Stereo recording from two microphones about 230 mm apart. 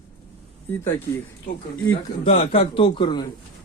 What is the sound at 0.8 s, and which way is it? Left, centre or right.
Speech, centre.